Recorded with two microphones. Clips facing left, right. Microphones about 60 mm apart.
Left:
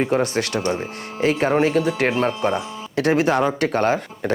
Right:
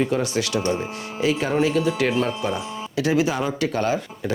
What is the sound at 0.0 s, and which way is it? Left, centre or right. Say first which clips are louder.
Speech: left 2 dB; left.